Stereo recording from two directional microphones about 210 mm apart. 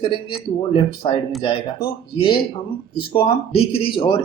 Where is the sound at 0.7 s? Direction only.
25° left (ahead or behind).